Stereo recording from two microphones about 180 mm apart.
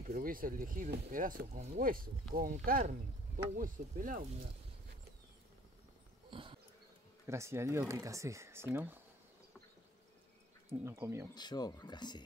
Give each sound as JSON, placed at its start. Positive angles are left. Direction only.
{"t": 0.0, "sound": "speech", "side_deg": -50}
{"t": 6.3, "sound": "bee", "side_deg": -30}
{"t": 7.2, "sound": "speech", "side_deg": -15}
{"t": 10.7, "sound": "speech", "side_deg": -15}
{"t": 11.3, "sound": "speech", "side_deg": 25}